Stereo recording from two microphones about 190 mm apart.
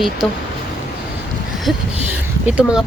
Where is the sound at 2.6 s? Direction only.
5° right (ahead or behind).